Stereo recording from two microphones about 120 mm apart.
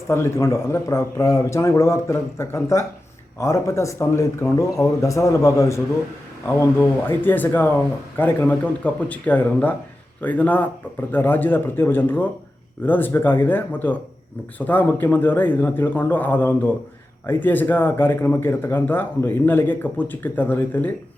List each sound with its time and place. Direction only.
0.1 s a man's voice: 25° left (ahead or behind)